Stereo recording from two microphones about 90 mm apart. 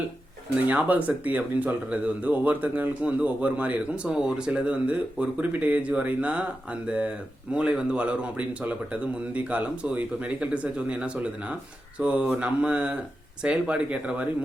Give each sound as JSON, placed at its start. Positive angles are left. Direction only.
{"t": 0.7, "sound": "speech", "side_deg": -15}